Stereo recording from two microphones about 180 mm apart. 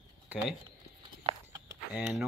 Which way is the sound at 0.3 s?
10° right (ahead or behind).